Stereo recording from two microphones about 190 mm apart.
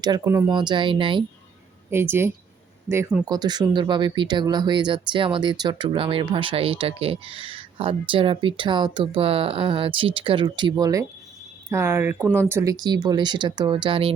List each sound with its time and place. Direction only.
0.0 s speech: 20° right (ahead or behind)
1.9 s a woman's voice: 15° right (ahead or behind)
3.2 s speech: 20° right (ahead or behind)